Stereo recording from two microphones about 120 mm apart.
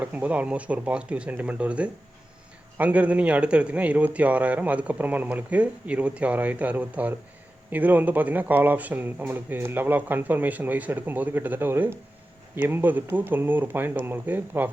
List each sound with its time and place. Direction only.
0.0 s a man's voice: 10° right (ahead or behind)